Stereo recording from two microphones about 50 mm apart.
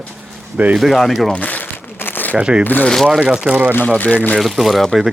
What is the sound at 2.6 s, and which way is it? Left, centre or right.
Speech, left.